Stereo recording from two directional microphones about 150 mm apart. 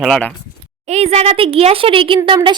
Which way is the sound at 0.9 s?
45° right (ahead or behind).